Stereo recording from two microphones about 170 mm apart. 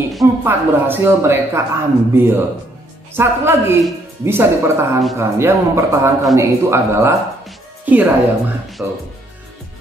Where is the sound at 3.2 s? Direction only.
15° right (ahead or behind).